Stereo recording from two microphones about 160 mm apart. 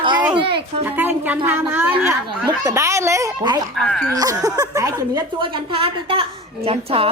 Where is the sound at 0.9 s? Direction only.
10° right (ahead or behind).